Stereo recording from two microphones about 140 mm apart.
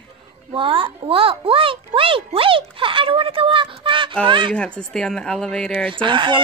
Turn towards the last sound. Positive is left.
turn(degrees=-35)  # may be behind; listen again after turning